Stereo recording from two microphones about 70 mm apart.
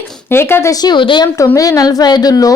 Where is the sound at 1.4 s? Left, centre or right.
Left.